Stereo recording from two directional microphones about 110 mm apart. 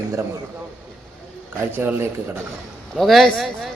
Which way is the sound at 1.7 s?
20° right (ahead or behind).